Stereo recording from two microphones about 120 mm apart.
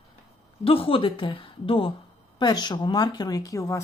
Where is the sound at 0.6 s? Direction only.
50° left (ahead or behind).